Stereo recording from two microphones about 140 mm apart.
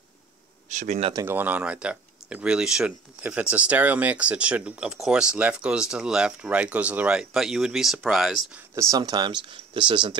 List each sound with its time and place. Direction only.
0.7 s speech: 60° right (ahead or behind)
1.1 s speech: 15° right (ahead or behind)
8.7 s speech: 25° right (ahead or behind)